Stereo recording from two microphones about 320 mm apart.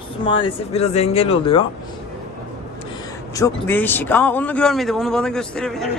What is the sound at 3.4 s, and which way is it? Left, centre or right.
A man's voice, centre.